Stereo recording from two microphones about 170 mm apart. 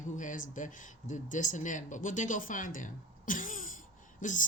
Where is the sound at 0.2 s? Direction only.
50° left (ahead or behind).